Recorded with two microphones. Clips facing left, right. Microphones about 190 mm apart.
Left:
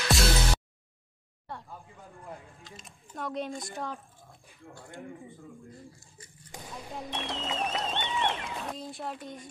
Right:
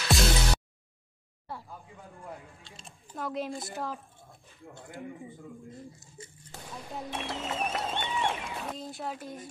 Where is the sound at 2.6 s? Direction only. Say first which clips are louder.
Left 2 dB; 30° right (ahead or behind).